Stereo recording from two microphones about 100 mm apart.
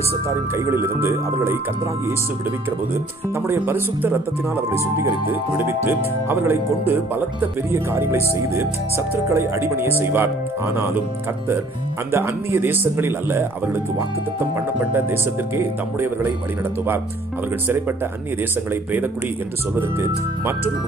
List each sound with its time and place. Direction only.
0.1 s speech: 25° right (ahead or behind)
3.3 s speech: 25° right (ahead or behind)
12.1 s speech: 25° right (ahead or behind)